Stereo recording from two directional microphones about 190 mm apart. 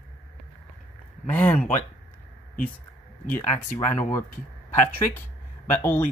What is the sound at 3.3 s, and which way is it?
Speech, 10° left (ahead or behind).